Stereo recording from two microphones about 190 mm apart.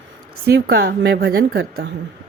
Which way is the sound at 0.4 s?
60° right (ahead or behind).